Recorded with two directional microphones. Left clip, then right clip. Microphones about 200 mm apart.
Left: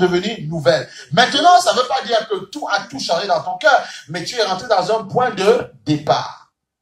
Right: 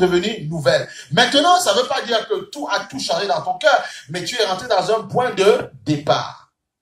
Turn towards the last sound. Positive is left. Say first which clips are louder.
# left 1 dB
turn(degrees=-25)  # may be behind; listen again after turning